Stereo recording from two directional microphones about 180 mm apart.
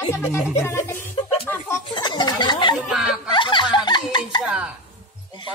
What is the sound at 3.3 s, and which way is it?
Snicker, 25° left (ahead or behind).